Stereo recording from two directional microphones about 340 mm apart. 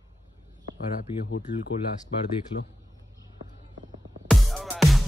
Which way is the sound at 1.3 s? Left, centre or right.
Left.